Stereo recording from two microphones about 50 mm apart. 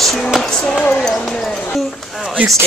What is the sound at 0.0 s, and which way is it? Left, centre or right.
Music, centre.